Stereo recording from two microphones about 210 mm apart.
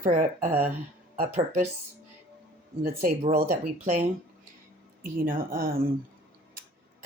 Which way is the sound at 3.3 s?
40° right (ahead or behind).